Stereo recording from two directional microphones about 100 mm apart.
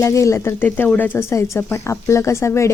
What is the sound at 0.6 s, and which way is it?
Speech, 15° left (ahead or behind).